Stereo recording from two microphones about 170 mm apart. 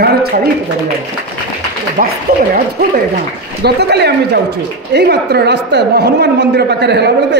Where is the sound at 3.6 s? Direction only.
75° right (ahead or behind).